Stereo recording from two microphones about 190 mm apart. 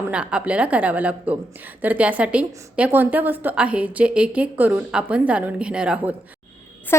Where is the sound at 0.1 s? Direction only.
5° right (ahead or behind).